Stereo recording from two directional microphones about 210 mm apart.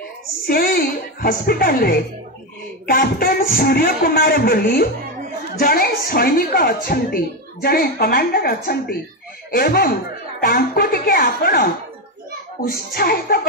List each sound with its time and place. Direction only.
0.5 s a woman's voice: 45° left (ahead or behind)